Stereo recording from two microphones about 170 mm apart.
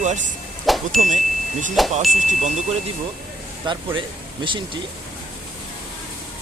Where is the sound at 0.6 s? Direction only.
Centre (ahead or behind).